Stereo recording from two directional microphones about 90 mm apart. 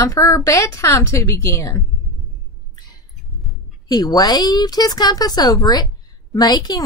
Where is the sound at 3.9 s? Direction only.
45° left (ahead or behind).